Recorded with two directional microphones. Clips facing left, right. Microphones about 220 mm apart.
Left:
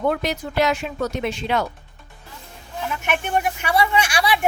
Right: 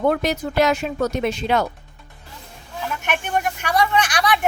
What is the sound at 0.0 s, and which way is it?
Speech, 45° right (ahead or behind).